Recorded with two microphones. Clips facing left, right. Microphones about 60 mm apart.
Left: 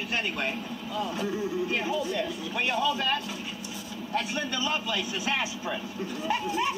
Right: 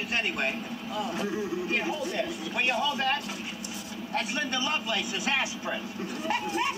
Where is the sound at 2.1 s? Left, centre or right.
Right.